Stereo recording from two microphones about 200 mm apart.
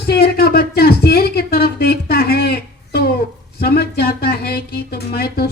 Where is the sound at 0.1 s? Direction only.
50° left (ahead or behind).